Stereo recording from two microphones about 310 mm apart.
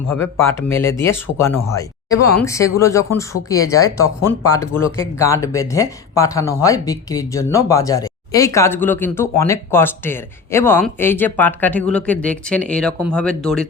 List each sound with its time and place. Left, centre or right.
0.1 s speech: centre